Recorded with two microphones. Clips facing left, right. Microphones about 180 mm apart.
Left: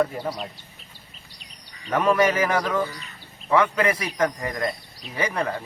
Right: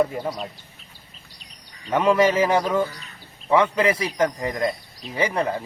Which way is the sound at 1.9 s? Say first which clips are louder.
Right 2 dB; 25° right (ahead or behind).